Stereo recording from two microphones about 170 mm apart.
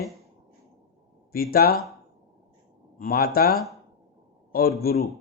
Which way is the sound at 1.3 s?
60° left (ahead or behind).